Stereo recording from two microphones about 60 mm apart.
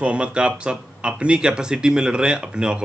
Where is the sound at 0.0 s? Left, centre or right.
Centre.